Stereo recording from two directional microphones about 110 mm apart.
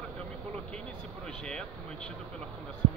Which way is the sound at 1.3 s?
10° left (ahead or behind).